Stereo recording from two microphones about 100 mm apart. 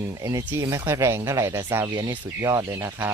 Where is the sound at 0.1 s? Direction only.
30° right (ahead or behind).